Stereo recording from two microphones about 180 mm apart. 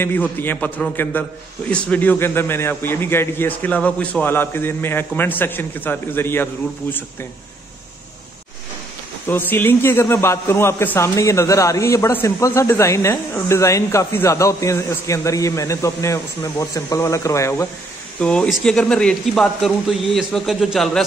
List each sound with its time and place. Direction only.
0.0 s a man's voice: 10° left (ahead or behind)
9.3 s a man's voice: 10° left (ahead or behind)
18.2 s speech: 5° left (ahead or behind)